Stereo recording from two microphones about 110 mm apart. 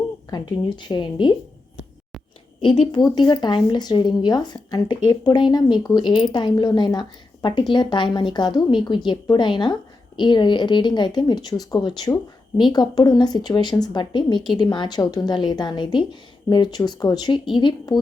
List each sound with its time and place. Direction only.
0.3 s speech: 40° left (ahead or behind)
2.6 s speech: 45° left (ahead or behind)